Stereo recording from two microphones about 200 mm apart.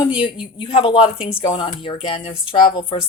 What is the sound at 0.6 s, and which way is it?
Speech, 25° left (ahead or behind).